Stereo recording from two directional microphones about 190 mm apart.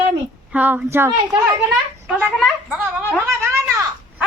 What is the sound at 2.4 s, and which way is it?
A child's voice, 5° right (ahead or behind).